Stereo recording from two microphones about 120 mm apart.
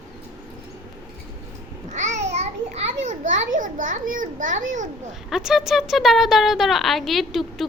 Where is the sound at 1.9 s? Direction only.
80° right.